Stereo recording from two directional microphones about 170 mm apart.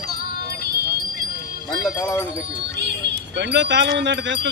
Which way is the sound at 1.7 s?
20° left (ahead or behind).